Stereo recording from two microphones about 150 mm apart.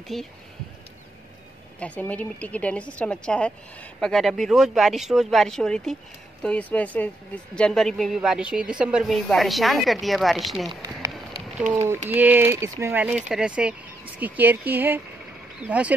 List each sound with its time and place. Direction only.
0.1 s a woman's voice: centre (ahead or behind)
1.8 s a woman's voice: 10° left (ahead or behind)
10.7 s speech: 25° right (ahead or behind)
11.5 s speech: 10° right (ahead or behind)